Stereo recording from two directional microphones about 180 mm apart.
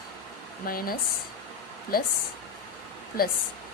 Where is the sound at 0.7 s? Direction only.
55° left (ahead or behind).